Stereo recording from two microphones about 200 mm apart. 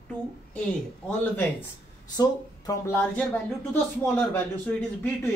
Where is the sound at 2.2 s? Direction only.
15° left (ahead or behind).